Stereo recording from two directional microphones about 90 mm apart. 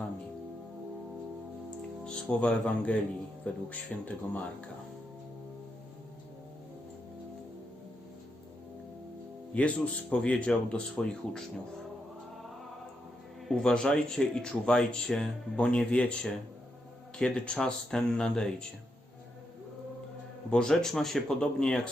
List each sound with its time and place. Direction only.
2.0 s speech: 10° left (ahead or behind)
9.6 s speech: 15° left (ahead or behind)
13.5 s speech: 5° left (ahead or behind)
20.5 s speech: 5° left (ahead or behind)